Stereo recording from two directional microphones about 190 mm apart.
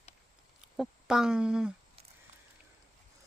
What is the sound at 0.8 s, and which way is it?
Speech, 5° right (ahead or behind).